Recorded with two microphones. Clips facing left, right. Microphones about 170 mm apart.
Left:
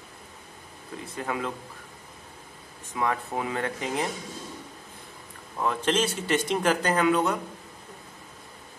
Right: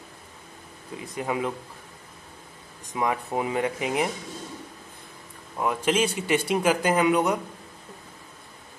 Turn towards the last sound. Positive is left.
turn(degrees=-15)  # may be behind; listen again after turning